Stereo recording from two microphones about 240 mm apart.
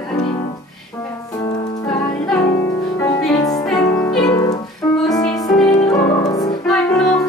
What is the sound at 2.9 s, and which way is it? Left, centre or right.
Music, centre.